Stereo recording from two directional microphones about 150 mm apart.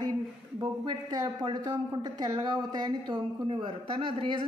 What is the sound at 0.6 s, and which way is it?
A woman's voice, 30° right (ahead or behind).